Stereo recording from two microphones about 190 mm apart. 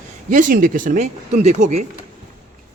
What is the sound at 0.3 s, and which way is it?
Speech, 45° right (ahead or behind).